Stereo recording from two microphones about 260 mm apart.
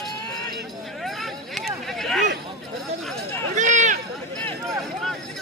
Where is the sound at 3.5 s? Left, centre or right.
Right.